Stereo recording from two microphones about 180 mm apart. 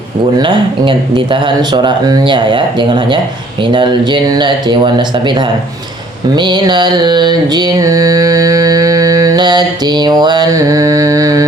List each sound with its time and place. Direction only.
0.3 s mantra: 25° right (ahead or behind)